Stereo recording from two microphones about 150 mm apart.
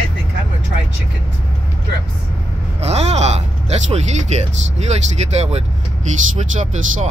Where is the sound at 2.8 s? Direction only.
45° right (ahead or behind).